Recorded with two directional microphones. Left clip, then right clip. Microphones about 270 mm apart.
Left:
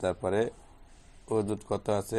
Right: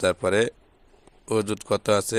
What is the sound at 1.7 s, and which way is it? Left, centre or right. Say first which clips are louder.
Speech: right 9 dB; right.